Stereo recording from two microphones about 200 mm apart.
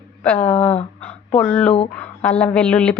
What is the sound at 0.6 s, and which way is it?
Speech, 30° left (ahead or behind).